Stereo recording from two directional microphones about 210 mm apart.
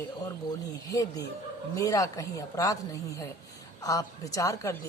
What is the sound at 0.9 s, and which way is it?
A woman's voice, 15° left (ahead or behind).